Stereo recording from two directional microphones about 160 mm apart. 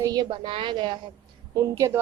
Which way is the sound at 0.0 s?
25° right (ahead or behind).